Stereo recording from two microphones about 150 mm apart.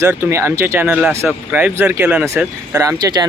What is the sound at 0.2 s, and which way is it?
Speech, 20° right (ahead or behind).